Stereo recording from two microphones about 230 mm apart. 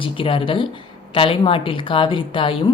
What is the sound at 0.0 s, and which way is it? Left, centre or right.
A woman's voice, left.